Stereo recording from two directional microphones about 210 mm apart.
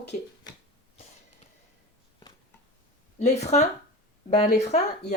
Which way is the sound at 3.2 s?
30° left (ahead or behind).